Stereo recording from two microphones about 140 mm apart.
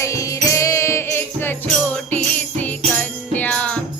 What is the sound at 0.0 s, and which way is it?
Music, 20° left (ahead or behind).